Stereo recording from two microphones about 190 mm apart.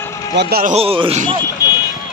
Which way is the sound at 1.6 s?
20° left (ahead or behind).